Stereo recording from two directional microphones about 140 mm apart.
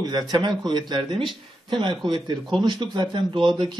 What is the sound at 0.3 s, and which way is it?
Speech, 30° right (ahead or behind).